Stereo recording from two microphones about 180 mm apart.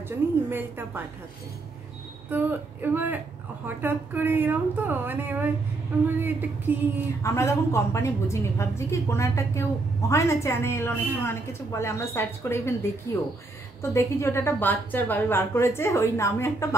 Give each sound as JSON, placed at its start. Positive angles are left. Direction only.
{"t": 0.5, "sound": "a woman's voice", "side_deg": -10}
{"t": 2.3, "sound": "a woman's voice", "side_deg": -10}
{"t": 7.2, "sound": "a woman's voice", "side_deg": 15}